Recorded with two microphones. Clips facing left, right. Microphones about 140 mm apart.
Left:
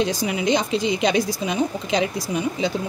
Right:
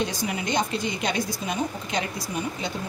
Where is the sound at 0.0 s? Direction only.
90° left.